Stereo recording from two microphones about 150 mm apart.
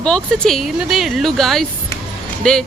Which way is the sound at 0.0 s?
5° left (ahead or behind).